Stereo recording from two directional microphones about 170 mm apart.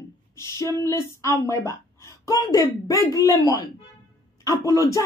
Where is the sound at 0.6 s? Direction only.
15° left (ahead or behind).